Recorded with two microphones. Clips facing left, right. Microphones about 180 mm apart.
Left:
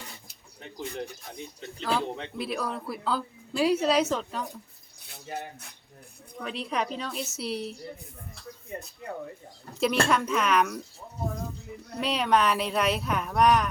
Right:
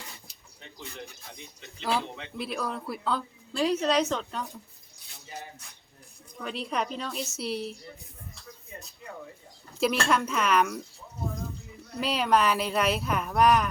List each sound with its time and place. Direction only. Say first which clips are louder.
0.3 s a sound: left 5 dB; 50° left (ahead or behind)
1.8 s a man's voice: left 1 dB; 5° right (ahead or behind)
5.1 s speech: left 6 dB; 60° left (ahead or behind)
6.4 s a woman's voice: even; centre (ahead or behind)
8.7 s speech: left 8 dB; 55° left (ahead or behind)
9.8 s a woman's voice: left 1 dB; centre (ahead or behind)
11.9 s a woman's voice: even; centre (ahead or behind)